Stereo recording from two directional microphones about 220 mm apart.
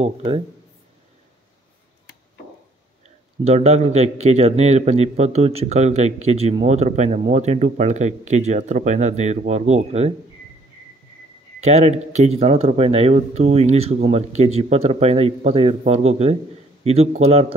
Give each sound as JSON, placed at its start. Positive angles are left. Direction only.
{"t": 0.0, "sound": "speech", "side_deg": -25}
{"t": 3.4, "sound": "speech", "side_deg": -30}
{"t": 11.6, "sound": "speech", "side_deg": -30}